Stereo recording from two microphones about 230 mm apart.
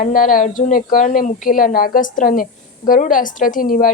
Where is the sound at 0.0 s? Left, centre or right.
Left.